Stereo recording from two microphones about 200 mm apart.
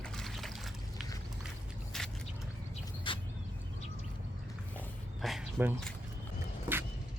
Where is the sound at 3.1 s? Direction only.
25° left (ahead or behind).